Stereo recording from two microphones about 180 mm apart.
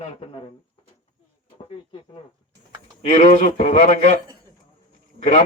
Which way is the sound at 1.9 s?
30° left (ahead or behind).